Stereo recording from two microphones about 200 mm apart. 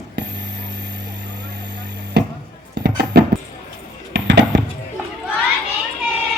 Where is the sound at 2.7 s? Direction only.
55° right (ahead or behind).